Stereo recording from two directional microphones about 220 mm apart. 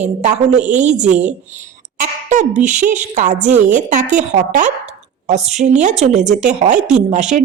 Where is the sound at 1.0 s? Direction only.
5° right (ahead or behind).